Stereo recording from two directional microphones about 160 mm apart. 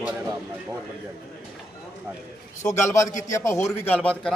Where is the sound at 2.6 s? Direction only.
20° left (ahead or behind).